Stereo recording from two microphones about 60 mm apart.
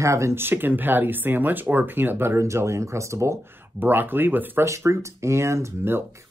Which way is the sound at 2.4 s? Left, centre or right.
Right.